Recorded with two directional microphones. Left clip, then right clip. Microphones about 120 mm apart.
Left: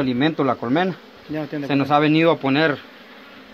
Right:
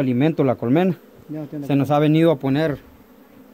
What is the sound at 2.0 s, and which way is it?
Speech, 75° right (ahead or behind).